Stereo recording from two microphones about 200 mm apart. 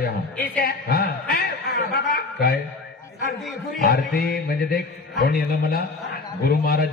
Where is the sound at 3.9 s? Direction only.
50° left (ahead or behind).